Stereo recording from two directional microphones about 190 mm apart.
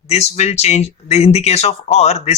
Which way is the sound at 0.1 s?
35° left (ahead or behind).